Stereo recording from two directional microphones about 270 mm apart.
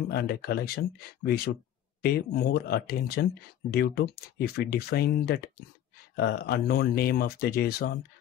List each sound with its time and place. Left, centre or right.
0.1 s speech: left